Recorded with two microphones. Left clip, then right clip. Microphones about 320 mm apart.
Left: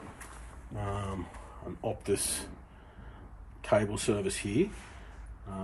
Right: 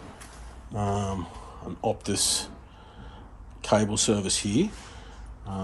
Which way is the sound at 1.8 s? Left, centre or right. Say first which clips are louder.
Right 5 dB; centre.